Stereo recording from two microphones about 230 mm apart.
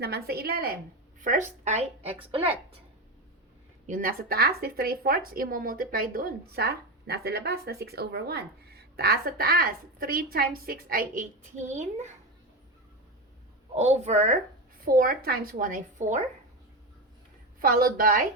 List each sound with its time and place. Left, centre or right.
0.0 s a woman's voice: right
3.8 s speech: right
13.7 s a woman's voice: right
17.6 s speech: right